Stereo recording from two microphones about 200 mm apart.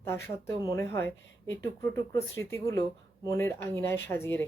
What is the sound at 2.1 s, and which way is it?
Speech, 15° left (ahead or behind).